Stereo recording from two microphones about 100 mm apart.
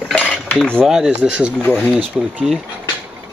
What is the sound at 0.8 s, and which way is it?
Speech, 5° right (ahead or behind).